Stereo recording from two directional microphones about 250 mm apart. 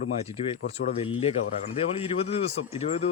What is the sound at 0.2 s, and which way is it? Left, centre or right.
Speech, left.